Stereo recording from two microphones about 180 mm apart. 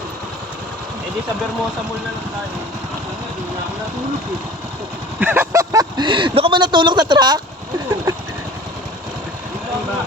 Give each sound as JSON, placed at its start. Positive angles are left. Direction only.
{"t": 5.2, "sound": "speech", "side_deg": -10}